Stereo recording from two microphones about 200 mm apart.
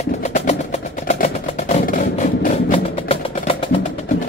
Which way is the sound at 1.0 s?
35° left (ahead or behind).